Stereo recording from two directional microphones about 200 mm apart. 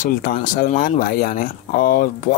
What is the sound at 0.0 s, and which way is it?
Speech, 45° left (ahead or behind).